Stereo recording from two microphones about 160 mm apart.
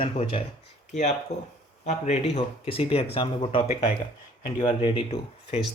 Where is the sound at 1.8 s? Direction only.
40° left (ahead or behind).